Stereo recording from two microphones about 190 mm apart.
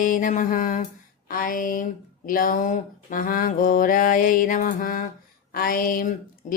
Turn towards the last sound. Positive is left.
turn(degrees=45)  # may be behind; listen again after turning